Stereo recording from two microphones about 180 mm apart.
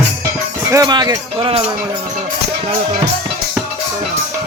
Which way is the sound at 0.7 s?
20° right (ahead or behind).